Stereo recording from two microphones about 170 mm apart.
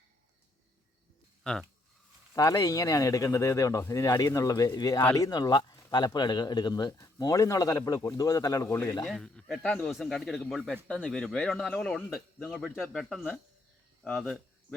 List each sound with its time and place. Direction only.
1.5 s speech: 5° left (ahead or behind)
2.3 s speech: 20° left (ahead or behind)
9.0 s speech: 5° left (ahead or behind)